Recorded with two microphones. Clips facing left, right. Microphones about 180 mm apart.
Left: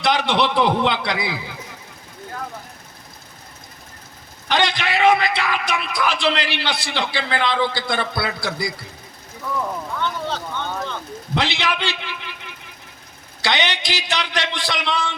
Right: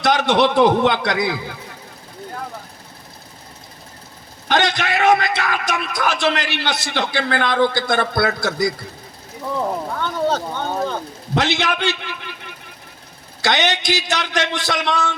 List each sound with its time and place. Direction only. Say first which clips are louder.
0.0 s a man's voice: right 3 dB; 45° right (ahead or behind)
4.4 s a man's voice: right 2 dB; 50° right (ahead or behind)
9.4 s speech: right 3 dB; 30° right (ahead or behind)
9.9 s a man's voice: right 5 dB; 45° right (ahead or behind)
13.4 s a man's voice: right 3 dB; 45° right (ahead or behind)